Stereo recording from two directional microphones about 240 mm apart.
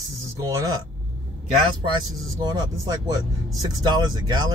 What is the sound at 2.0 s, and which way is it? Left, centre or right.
Speech, centre.